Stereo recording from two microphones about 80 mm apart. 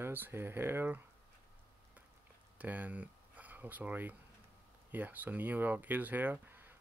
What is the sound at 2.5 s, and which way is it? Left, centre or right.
Speech, right.